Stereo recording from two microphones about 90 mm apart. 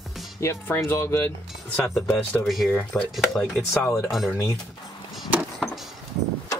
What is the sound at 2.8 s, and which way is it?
Speech, 10° left (ahead or behind).